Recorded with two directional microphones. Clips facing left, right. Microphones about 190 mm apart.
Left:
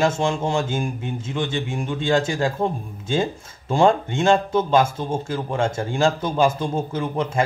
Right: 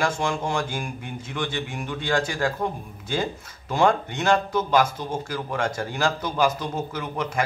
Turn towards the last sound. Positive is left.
turn(degrees=25)  # may be behind; listen again after turning